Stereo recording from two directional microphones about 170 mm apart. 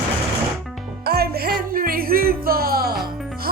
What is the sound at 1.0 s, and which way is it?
Music, 65° right (ahead or behind).